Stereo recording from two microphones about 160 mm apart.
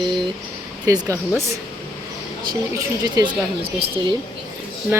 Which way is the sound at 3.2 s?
20° right (ahead or behind).